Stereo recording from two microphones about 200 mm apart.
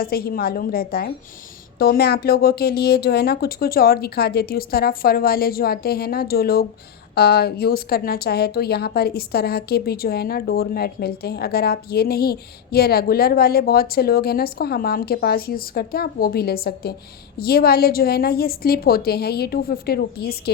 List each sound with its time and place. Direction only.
0.0 s a woman's voice: 50° left (ahead or behind)